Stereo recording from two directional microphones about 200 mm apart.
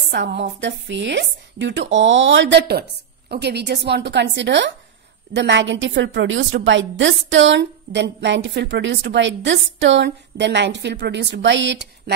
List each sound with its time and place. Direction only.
0.1 s a woman's voice: 60° right (ahead or behind)